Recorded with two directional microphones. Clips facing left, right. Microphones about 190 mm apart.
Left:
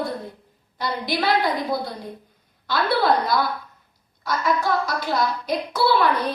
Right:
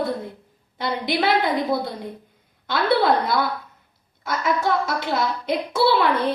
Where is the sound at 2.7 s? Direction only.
20° right (ahead or behind).